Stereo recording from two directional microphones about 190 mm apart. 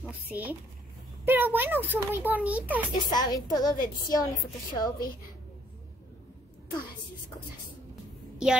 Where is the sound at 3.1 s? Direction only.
20° left (ahead or behind).